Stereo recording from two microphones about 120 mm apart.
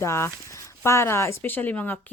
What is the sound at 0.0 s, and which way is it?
Speech, 20° left (ahead or behind).